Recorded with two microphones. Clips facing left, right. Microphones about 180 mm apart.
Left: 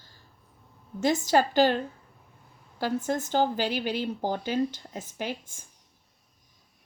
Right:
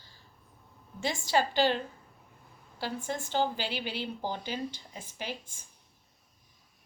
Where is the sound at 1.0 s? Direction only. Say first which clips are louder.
Left 6 dB; 45° left (ahead or behind).